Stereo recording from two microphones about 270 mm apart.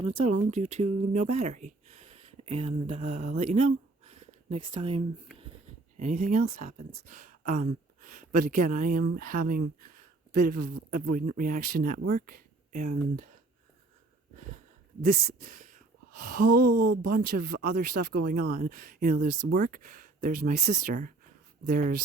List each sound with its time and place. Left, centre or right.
0.0 s speech: right
15.0 s speech: right